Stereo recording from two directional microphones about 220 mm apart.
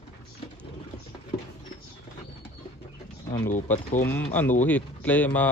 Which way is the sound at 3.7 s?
10° left (ahead or behind).